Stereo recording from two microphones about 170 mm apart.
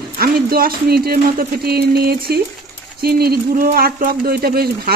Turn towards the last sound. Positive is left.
turn(degrees=-65)  # may be behind; listen again after turning